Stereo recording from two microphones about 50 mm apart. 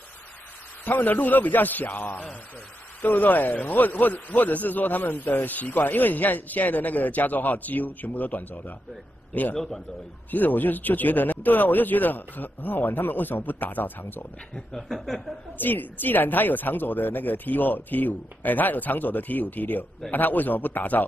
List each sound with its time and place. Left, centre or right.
0.8 s a man's voice: left
14.5 s a man's voice: centre
15.5 s a man's voice: left